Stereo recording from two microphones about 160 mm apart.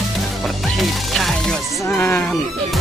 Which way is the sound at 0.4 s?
Centre (ahead or behind).